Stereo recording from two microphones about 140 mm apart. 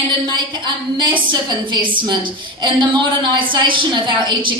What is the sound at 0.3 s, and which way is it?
A woman's voice, 30° right (ahead or behind).